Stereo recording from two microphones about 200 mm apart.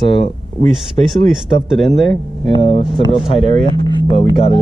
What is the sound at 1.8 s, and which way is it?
Speech, centre (ahead or behind).